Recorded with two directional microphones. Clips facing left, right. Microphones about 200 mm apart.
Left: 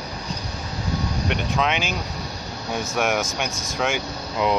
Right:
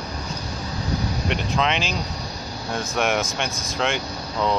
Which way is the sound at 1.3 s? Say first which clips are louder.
Even; 5° left (ahead or behind).